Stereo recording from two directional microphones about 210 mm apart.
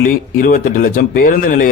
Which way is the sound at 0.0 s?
40° left (ahead or behind).